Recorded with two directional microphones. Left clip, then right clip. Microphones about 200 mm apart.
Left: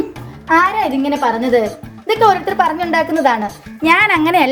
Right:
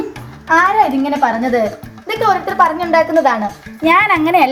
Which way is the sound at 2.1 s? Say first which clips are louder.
Left 2 dB; 20° left (ahead or behind).